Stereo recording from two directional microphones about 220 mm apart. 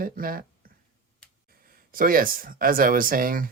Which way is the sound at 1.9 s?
40° right (ahead or behind).